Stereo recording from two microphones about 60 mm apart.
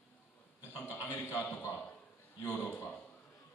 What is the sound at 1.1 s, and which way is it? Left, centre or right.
Speech, left.